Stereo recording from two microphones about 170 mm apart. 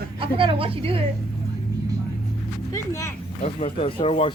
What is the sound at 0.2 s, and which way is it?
Speech, 30° right (ahead or behind).